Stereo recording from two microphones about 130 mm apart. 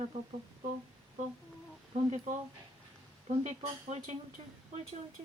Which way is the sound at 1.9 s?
60° right (ahead or behind).